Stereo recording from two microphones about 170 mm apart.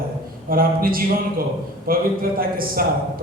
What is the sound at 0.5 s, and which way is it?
A man's voice, 60° right (ahead or behind).